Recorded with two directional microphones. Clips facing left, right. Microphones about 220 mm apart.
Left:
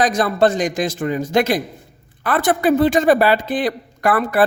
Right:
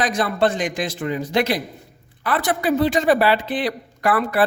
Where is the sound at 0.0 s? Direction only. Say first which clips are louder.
Left 4 dB; 40° left (ahead or behind).